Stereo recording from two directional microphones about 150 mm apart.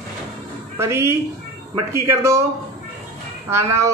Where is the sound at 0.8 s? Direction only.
15° right (ahead or behind).